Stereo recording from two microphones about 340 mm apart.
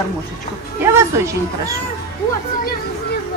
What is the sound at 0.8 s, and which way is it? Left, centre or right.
Speech, centre.